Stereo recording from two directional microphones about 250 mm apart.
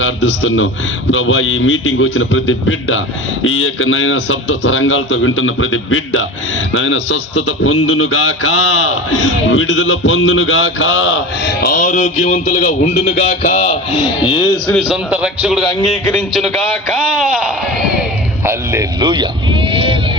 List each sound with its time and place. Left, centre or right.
0.0 s a man's voice: left
9.3 s a man's voice: left
11.6 s speech: left; by 14.5 s centre
14.7 s a man's voice: centre